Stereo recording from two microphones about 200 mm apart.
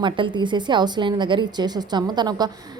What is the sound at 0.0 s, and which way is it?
A woman's voice, 25° right (ahead or behind).